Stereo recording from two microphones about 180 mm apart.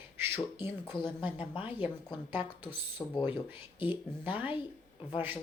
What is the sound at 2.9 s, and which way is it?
Speech, 25° left (ahead or behind).